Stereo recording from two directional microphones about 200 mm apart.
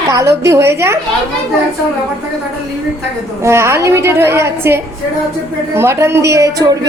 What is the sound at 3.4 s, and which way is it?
A woman's voice, 15° right (ahead or behind).